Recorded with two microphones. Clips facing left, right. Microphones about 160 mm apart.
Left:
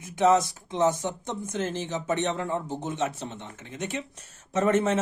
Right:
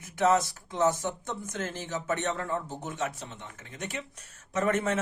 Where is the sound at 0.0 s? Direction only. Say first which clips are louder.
Left 3 dB; 20° left (ahead or behind).